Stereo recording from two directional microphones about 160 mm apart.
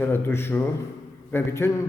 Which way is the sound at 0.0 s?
15° left (ahead or behind).